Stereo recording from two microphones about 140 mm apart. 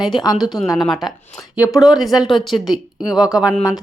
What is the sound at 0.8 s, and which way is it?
A woman's voice, centre (ahead or behind).